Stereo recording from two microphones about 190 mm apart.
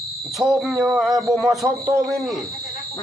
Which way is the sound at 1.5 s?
15° right (ahead or behind).